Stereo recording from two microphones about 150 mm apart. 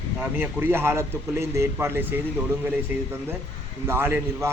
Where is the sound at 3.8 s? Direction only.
15° right (ahead or behind).